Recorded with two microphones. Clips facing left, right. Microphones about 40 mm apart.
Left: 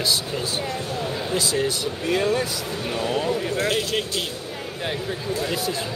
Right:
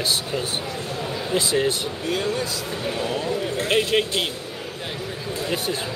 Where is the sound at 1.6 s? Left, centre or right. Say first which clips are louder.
Right 1 dB; right.